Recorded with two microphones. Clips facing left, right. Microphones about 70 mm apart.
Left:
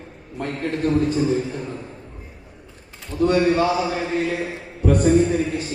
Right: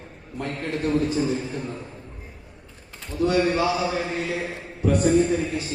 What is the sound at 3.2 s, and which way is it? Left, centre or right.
Speech, left.